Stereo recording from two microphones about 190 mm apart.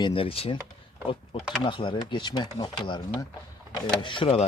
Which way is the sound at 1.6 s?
25° left (ahead or behind).